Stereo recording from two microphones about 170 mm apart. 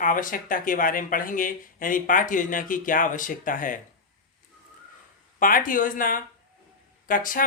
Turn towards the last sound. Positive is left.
turn(degrees=55)  # may be behind; listen again after turning